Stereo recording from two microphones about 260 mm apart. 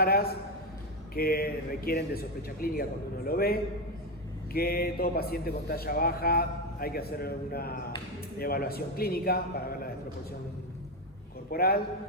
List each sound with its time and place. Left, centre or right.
0.0 s a man's voice: left
11.5 s a man's voice: left